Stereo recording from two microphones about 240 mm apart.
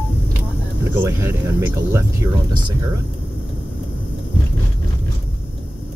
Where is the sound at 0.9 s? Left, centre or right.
Centre.